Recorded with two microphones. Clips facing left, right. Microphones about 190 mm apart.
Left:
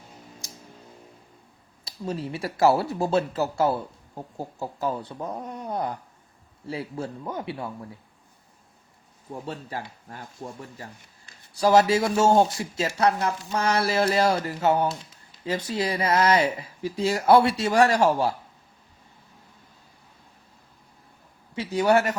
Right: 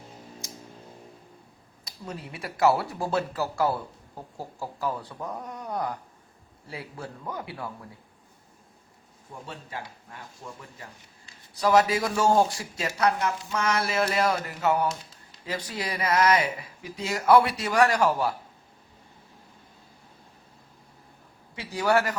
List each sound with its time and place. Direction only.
1.8 s speech: 30° left (ahead or behind)
9.5 s speech: 40° left (ahead or behind)
21.5 s speech: 25° left (ahead or behind)